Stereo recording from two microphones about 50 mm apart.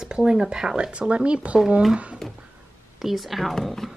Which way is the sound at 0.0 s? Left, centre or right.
Centre.